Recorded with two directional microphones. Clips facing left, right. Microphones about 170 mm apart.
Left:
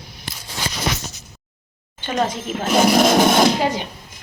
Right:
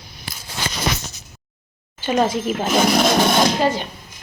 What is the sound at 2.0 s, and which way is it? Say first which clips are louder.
Speech: right 3 dB; 5° right (ahead or behind).